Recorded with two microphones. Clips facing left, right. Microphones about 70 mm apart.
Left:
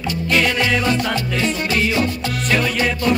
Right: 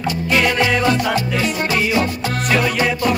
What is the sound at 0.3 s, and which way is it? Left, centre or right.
Music, centre.